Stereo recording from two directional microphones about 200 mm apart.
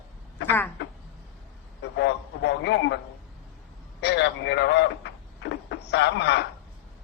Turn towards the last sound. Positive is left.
turn(degrees=60)  # may be behind; listen again after turning